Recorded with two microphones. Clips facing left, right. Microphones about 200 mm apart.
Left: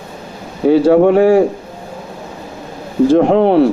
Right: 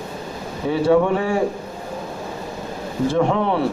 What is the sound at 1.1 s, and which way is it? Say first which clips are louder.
Speech: left 11 dB; 70° left (ahead or behind).